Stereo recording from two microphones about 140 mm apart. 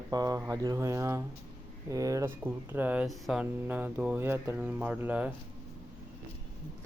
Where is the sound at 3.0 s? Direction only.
Centre (ahead or behind).